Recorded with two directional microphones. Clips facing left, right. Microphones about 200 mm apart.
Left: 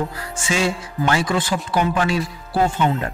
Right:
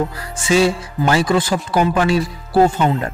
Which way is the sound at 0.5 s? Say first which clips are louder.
Right 7 dB; 35° right (ahead or behind).